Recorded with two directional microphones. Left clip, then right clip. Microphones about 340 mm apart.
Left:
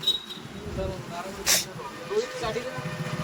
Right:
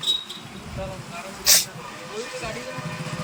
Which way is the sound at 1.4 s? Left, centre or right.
Centre.